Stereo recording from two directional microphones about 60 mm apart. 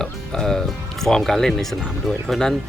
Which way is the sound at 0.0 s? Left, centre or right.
Centre.